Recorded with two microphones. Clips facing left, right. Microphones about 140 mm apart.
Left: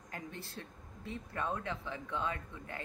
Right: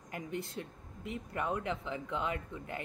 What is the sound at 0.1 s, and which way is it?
Speech, 20° right (ahead or behind).